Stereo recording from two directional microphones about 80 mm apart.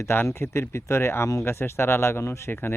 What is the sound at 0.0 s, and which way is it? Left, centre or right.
Speech, left.